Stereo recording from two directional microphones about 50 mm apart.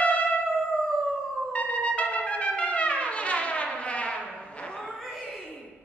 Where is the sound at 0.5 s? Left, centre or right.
Centre.